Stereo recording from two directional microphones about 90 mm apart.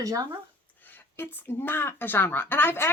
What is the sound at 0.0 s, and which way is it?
Speech, 40° right (ahead or behind).